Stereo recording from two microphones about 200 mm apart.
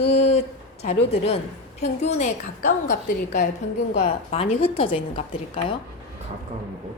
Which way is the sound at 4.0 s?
30° left (ahead or behind).